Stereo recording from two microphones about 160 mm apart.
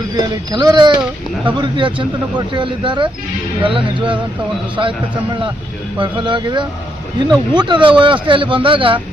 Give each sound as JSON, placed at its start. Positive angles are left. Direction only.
{"t": 0.2, "sound": "speech", "side_deg": -25}